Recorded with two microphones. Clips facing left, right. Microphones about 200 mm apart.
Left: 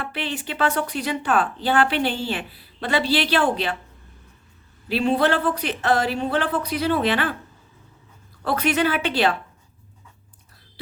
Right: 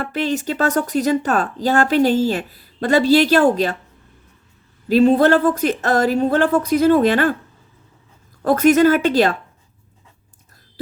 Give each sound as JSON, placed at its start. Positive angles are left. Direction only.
{"t": 0.0, "sound": "speech", "side_deg": -45}
{"t": 4.9, "sound": "speech", "side_deg": -45}
{"t": 8.4, "sound": "speech", "side_deg": -45}